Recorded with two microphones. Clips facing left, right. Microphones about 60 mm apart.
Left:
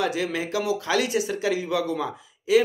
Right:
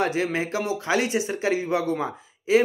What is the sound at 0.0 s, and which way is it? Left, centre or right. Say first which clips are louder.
Speech: right 2 dB; right.